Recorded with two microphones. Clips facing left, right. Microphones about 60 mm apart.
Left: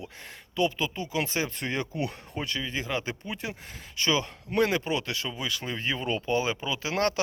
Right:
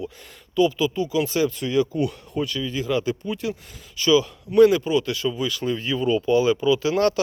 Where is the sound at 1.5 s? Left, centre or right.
Left.